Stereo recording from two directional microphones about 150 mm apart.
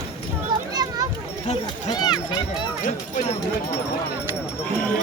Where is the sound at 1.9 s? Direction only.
30° left (ahead or behind).